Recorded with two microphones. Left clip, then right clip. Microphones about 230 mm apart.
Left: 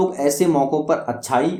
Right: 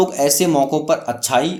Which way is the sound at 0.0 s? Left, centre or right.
Right.